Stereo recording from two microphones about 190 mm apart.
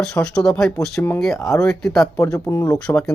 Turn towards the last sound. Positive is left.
turn(degrees=5)  # may be behind; listen again after turning